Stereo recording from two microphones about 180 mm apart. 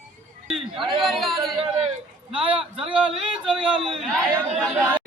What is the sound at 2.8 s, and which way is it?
A man's voice, 5° right (ahead or behind).